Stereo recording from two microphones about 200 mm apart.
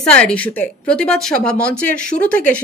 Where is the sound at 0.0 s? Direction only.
5° left (ahead or behind).